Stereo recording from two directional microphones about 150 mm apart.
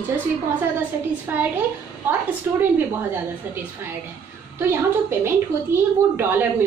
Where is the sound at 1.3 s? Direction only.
15° right (ahead or behind).